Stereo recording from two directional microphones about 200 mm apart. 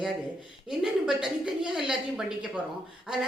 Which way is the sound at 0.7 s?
Centre (ahead or behind).